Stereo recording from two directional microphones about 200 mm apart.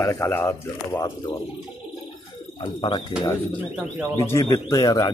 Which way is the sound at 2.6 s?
25° left (ahead or behind).